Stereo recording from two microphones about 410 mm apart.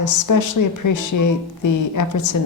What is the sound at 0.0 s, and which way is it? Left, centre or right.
A woman's voice, left.